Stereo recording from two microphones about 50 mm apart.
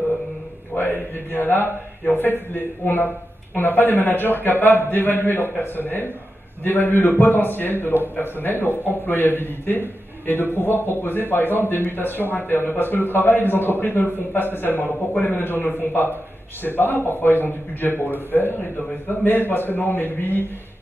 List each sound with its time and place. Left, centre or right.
0.7 s a man's voice: left